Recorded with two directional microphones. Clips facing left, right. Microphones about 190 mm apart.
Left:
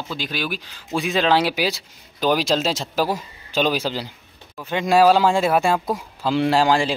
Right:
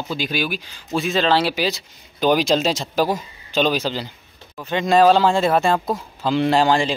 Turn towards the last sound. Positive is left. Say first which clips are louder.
# right 1 dB
turn(degrees=5)  # may be behind; listen again after turning